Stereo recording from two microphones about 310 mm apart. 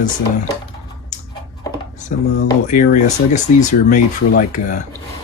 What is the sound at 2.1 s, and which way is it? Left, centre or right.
Speech, left.